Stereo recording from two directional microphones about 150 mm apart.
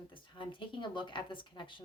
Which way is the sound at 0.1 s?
35° left (ahead or behind).